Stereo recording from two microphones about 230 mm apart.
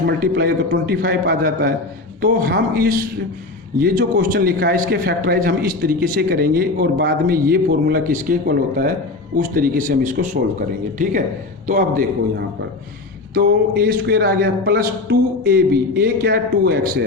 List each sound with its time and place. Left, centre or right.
0.0 s a man's voice: right
13.3 s a man's voice: right